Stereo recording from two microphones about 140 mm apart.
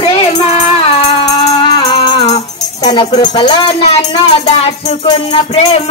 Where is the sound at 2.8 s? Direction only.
30° left (ahead or behind).